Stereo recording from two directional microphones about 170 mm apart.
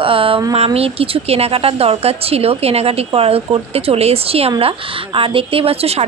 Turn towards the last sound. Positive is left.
turn(degrees=-35)  # may be behind; listen again after turning